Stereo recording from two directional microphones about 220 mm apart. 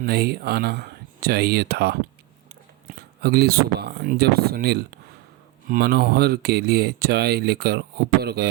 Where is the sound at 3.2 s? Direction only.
45° right (ahead or behind).